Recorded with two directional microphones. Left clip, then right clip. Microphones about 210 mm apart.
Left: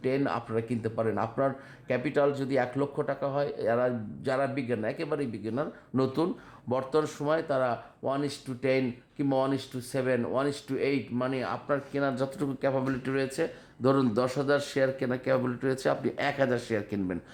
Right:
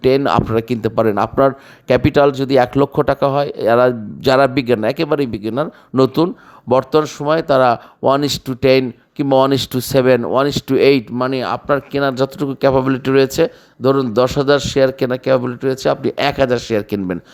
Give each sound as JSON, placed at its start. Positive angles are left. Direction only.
{"t": 0.0, "sound": "speech", "side_deg": -40}